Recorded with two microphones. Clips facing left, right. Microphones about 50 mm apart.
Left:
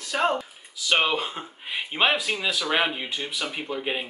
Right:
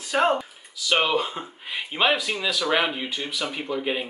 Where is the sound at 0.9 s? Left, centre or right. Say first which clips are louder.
Right 1 dB; centre.